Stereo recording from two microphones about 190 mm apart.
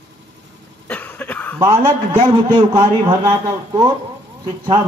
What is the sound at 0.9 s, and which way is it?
Cough, 10° left (ahead or behind).